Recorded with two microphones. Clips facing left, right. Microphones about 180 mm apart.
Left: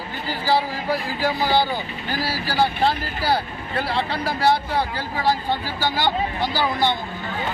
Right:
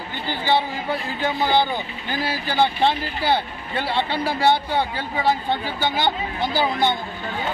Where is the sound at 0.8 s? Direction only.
5° left (ahead or behind).